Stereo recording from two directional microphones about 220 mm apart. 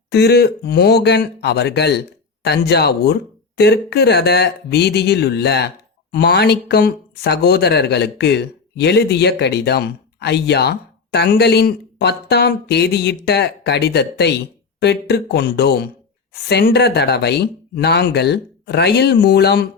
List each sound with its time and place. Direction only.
0.1 s speech: 50° left (ahead or behind)